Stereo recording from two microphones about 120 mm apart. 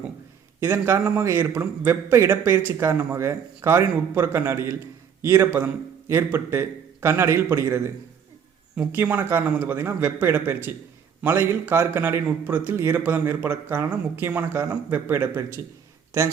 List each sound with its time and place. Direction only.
0.6 s speech: 20° right (ahead or behind)